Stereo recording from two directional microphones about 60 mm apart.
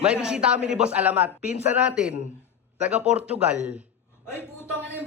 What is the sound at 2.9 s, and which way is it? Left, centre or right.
Speech, centre.